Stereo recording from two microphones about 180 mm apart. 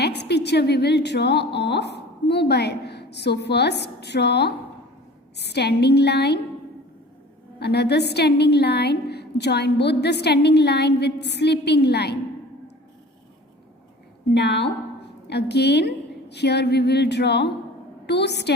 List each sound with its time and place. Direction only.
0.0 s a woman's voice: 65° left (ahead or behind)
7.6 s a woman's voice: 65° left (ahead or behind)
14.3 s a woman's voice: 70° left (ahead or behind)